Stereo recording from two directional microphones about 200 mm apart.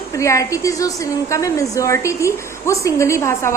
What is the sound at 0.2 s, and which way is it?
A woman's voice, 15° left (ahead or behind).